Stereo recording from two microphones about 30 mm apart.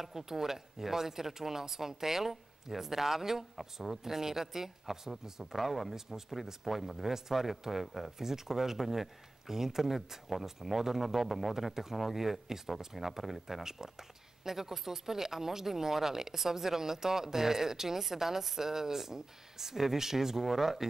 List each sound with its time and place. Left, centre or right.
0.0 s speech: centre
5.9 s speech: centre
8.2 s speech: centre
11.5 s speech: centre